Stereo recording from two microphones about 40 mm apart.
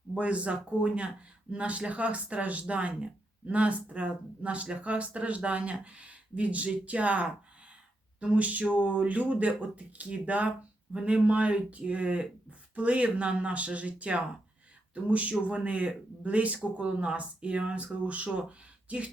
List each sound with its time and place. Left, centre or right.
0.2 s speech: right